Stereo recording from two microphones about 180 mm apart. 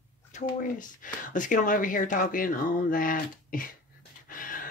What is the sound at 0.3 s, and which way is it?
Speech, 45° left (ahead or behind).